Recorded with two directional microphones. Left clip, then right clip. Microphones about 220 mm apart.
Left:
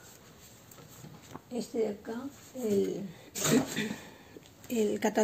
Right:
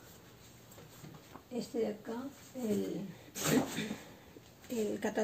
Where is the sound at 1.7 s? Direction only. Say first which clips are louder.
Left 4 dB; 50° left (ahead or behind).